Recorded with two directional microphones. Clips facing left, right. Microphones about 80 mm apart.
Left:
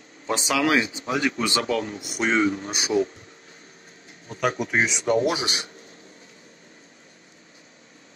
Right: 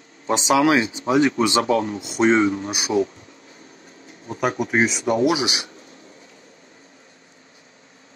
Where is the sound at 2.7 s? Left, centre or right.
Right.